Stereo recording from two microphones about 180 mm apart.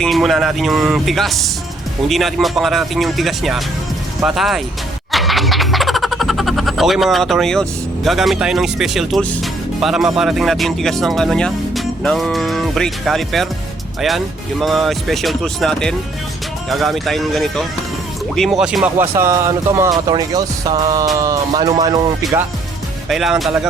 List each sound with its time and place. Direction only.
0.0 s speech: centre (ahead or behind)
14.6 s speech: centre (ahead or behind)
19.1 s speech: 15° right (ahead or behind)
23.0 s speech: centre (ahead or behind)